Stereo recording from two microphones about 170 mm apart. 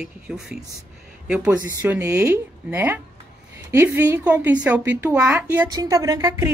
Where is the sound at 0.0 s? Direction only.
5° right (ahead or behind).